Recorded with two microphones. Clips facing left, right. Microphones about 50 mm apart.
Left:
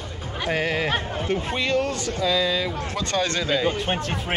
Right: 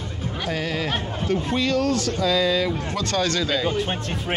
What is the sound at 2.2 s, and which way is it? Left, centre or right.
A man's voice, centre.